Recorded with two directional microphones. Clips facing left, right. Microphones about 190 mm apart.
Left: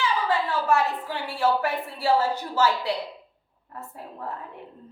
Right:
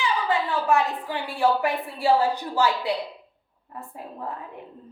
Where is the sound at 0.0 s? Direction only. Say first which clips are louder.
Even; 15° right (ahead or behind).